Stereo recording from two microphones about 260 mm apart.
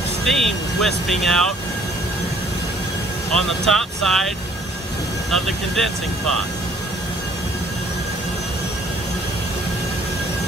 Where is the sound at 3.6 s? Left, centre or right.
Centre.